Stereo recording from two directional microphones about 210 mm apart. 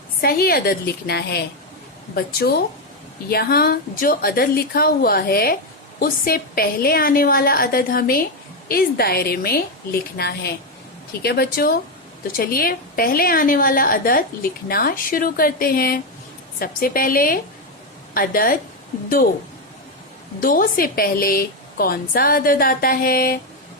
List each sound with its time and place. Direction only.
0.2 s a woman's voice: 45° left (ahead or behind)
20.4 s a woman's voice: 40° left (ahead or behind)